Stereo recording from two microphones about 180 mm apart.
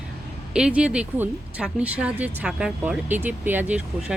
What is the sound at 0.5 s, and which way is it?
A woman's voice, 5° right (ahead or behind).